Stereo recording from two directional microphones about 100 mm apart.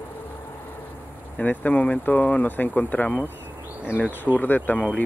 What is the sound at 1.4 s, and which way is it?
Speech, 15° left (ahead or behind).